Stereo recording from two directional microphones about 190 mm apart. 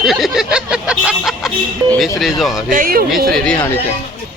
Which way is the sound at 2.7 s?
45° right (ahead or behind).